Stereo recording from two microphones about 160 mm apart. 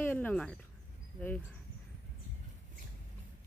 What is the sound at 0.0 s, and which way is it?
Speech, 10° left (ahead or behind).